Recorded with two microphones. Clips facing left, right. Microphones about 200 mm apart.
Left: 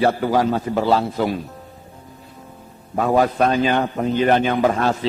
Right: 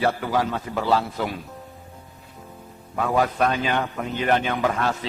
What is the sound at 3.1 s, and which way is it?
A man's voice, 35° left (ahead or behind).